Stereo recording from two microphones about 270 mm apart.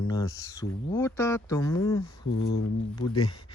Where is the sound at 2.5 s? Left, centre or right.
Left.